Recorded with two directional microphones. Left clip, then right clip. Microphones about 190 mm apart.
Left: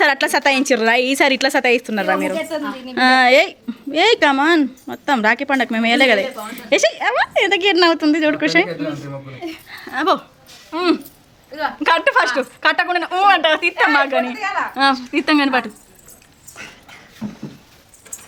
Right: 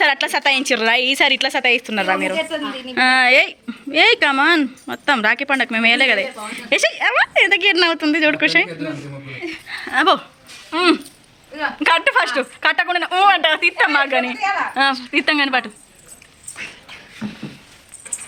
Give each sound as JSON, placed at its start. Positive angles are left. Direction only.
{"t": 0.0, "sound": "a woman's voice", "side_deg": 30}
{"t": 9.6, "sound": "speech", "side_deg": 5}